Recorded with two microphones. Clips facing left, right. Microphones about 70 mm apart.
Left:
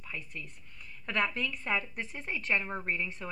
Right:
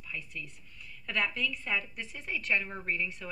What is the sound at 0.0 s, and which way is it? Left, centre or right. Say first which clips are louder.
A woman's voice: even; left.